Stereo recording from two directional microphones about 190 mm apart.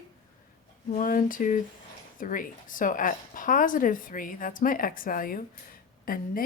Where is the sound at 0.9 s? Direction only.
45° left (ahead or behind).